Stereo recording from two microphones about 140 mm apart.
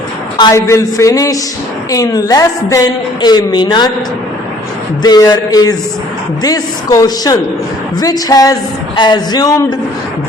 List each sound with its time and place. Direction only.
0.3 s a man's voice: 30° left (ahead or behind)
5.0 s a woman's voice: 30° left (ahead or behind)